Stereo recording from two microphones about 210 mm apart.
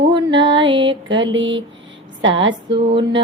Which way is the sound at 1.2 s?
60° right (ahead or behind).